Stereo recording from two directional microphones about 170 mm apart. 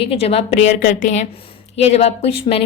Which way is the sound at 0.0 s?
35° left (ahead or behind).